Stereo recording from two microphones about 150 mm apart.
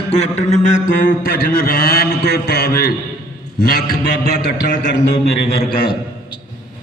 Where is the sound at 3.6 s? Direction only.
80° left.